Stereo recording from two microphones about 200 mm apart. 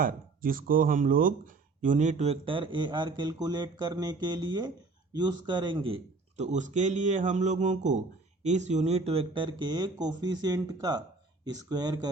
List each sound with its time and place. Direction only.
0.0 s speech: 45° right (ahead or behind); by 12.0 s 20° right (ahead or behind)